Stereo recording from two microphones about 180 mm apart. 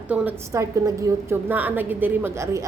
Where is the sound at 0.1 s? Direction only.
10° right (ahead or behind).